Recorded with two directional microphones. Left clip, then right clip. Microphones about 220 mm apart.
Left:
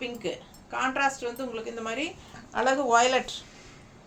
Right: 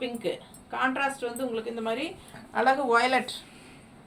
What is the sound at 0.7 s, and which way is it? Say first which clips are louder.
A woman's voice: left 1 dB; 15° left (ahead or behind).